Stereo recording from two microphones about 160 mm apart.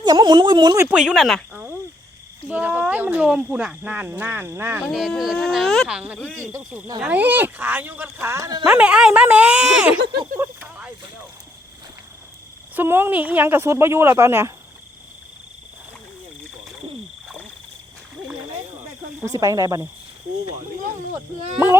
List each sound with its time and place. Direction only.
0.0 s speech: 25° right (ahead or behind)
0.8 s speech: 5° right (ahead or behind)
4.8 s speech: centre (ahead or behind)
7.0 s speech: 10° right (ahead or behind)
8.6 s speech: 5° right (ahead or behind)
10.3 s a sound: 10° right (ahead or behind)
12.7 s speech: 15° right (ahead or behind)
19.2 s speech: 20° right (ahead or behind)